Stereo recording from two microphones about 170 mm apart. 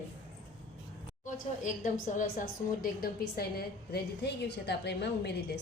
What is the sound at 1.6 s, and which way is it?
A woman's voice, 50° left (ahead or behind).